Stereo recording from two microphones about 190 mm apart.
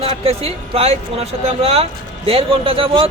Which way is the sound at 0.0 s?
30° right (ahead or behind).